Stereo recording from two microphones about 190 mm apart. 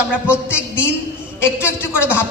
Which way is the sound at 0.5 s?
10° left (ahead or behind).